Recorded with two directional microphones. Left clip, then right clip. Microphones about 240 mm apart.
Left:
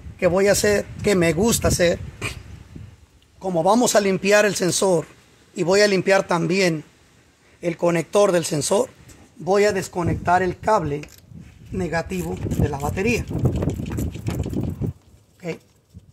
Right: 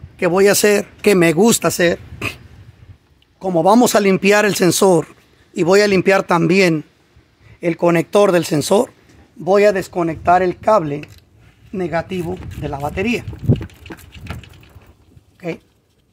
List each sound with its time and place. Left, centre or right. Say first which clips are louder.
0.2 s speech: right 5 dB; right
3.3 s speech: right 6 dB; right
13.5 s a sound: right 7 dB; centre